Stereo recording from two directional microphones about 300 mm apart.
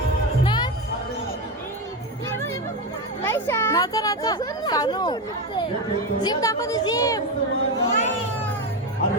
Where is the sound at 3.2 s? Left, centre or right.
Centre.